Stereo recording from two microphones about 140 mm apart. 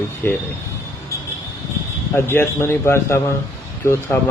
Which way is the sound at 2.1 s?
15° left (ahead or behind).